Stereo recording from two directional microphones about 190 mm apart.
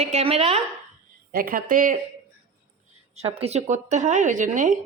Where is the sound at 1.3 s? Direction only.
50° right (ahead or behind).